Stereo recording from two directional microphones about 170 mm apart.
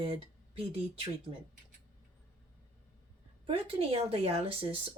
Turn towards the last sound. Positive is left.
turn(degrees=-35)  # may be behind; listen again after turning